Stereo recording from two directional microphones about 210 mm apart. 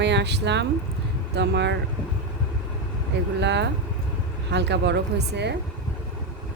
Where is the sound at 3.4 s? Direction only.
55° right (ahead or behind).